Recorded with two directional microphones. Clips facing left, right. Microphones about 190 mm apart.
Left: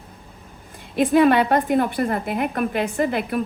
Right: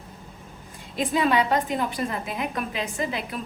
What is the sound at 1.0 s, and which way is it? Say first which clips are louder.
A woman's voice: left 7 dB; 55° left (ahead or behind).